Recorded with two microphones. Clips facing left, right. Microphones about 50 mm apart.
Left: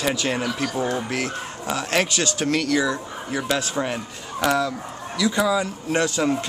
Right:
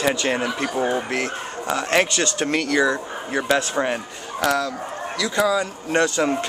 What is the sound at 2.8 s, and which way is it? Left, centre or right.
Speech, centre.